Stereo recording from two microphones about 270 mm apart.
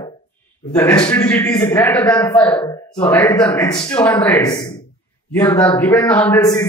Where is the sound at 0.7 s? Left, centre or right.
Centre.